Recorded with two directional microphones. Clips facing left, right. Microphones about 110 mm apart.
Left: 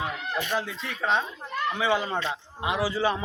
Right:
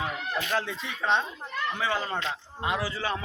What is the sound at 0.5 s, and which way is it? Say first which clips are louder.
Speech: even; 5° left (ahead or behind).